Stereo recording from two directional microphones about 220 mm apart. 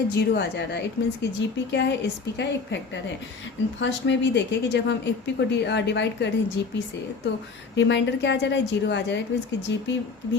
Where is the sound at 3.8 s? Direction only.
55° left (ahead or behind).